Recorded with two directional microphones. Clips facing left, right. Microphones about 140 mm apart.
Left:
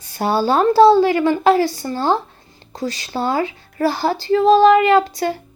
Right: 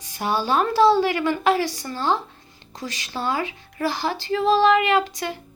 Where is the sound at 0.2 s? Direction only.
35° left (ahead or behind).